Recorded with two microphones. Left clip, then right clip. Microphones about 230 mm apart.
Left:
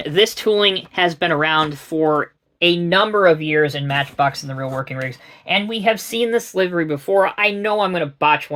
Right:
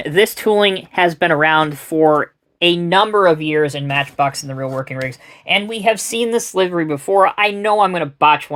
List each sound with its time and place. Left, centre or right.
0.0 s speech: right